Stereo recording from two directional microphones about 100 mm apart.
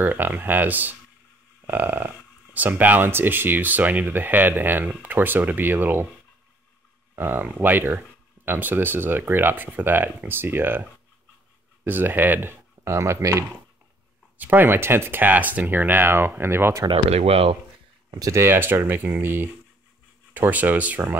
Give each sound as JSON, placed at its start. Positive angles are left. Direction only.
{"t": 0.0, "sound": "speech", "side_deg": -20}
{"t": 7.2, "sound": "speech", "side_deg": -20}
{"t": 12.7, "sound": "speech", "side_deg": -30}
{"t": 14.4, "sound": "speech", "side_deg": -20}
{"t": 16.9, "sound": "speech", "side_deg": -80}
{"t": 18.3, "sound": "speech", "side_deg": -25}